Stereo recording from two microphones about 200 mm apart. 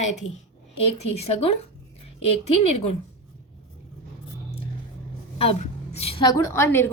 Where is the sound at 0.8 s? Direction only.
30° left (ahead or behind).